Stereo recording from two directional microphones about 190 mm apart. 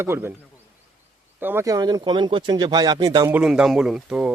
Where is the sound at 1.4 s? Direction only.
10° right (ahead or behind).